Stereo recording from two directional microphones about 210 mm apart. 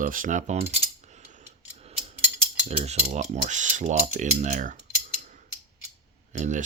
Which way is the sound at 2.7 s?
30° right (ahead or behind).